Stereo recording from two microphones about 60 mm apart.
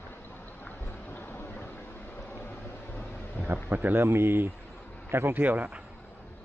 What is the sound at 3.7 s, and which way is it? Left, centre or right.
Speech, right.